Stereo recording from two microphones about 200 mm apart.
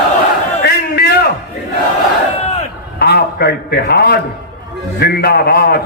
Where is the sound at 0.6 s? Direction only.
55° left (ahead or behind).